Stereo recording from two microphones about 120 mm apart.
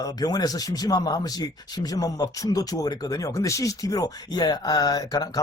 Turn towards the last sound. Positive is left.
turn(degrees=30)  # may be behind; listen again after turning